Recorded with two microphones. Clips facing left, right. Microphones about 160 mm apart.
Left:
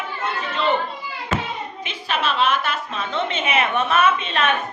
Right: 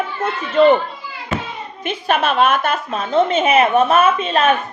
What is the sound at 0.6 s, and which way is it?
Speech, 50° right (ahead or behind).